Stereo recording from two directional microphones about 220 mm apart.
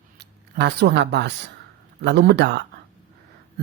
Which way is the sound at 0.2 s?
50° right (ahead or behind).